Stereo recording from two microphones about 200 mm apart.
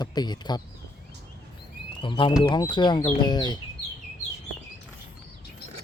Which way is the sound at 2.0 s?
25° left (ahead or behind).